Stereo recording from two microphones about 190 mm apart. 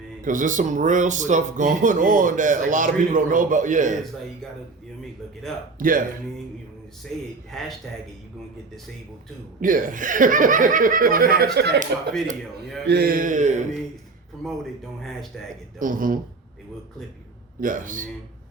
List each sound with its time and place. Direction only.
0.3 s speech: 45° right (ahead or behind)
5.8 s speech: 45° right (ahead or behind)
7.1 s speech: centre (ahead or behind)
9.6 s speech: 45° right (ahead or behind)
11.5 s speech: 60° right (ahead or behind)
12.9 s speech: 50° right (ahead or behind)
14.4 s speech: centre (ahead or behind)
15.8 s speech: 45° right (ahead or behind)
17.6 s speech: 45° right (ahead or behind)